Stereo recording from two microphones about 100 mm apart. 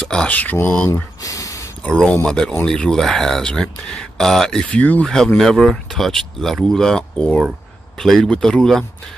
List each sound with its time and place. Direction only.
0.0 s speech: 10° left (ahead or behind)
1.2 s a sound: 35° left (ahead or behind)
1.8 s speech: 10° left (ahead or behind)